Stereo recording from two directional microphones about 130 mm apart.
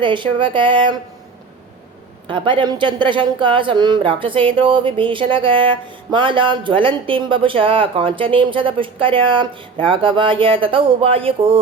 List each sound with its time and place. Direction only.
0.0 s speech: 40° right (ahead or behind)
2.2 s speech: 40° right (ahead or behind)